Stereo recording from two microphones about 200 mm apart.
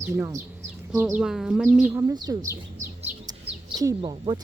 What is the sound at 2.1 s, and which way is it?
Speech, 20° right (ahead or behind).